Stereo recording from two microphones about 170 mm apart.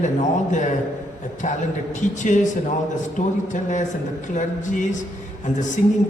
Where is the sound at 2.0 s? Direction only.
45° left (ahead or behind).